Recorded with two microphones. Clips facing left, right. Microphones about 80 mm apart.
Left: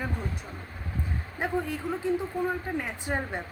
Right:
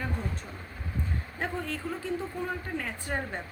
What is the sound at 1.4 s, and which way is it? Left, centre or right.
Speech, centre.